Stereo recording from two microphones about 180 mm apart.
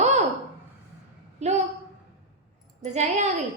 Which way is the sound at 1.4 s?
40° right (ahead or behind).